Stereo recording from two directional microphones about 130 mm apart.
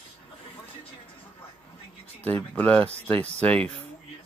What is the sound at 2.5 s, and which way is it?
Speech, 10° left (ahead or behind).